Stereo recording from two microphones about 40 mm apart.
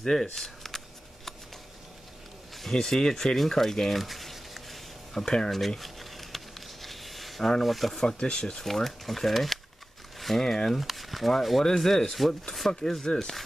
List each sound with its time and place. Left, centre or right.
0.0 s shuffling cards: centre
2.7 s speech: centre
4.0 s a sound: centre
5.2 s speech: centre
5.8 s a sound: centre
8.2 s speech: left
8.5 s speech: centre
10.1 s a sound: centre
10.4 s speech: centre
10.8 s speech: centre
13.0 s speech: centre